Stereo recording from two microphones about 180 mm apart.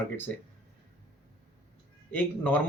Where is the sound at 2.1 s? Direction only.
10° left (ahead or behind).